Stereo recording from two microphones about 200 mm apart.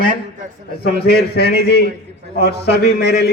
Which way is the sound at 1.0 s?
55° left (ahead or behind).